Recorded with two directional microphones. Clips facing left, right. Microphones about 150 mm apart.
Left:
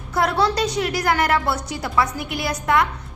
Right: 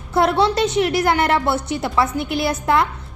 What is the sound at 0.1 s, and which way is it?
A woman's voice, 25° right (ahead or behind).